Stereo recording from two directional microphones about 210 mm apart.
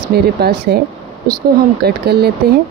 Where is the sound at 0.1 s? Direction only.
50° right (ahead or behind).